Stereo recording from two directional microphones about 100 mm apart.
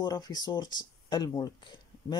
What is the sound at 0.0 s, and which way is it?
Speech, 45° left (ahead or behind).